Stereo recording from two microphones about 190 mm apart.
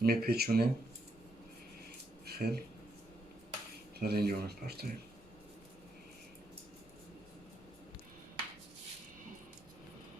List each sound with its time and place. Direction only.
0.0 s speech: 55° right (ahead or behind)
2.2 s a sound: 55° right (ahead or behind)
4.0 s speech: 55° right (ahead or behind)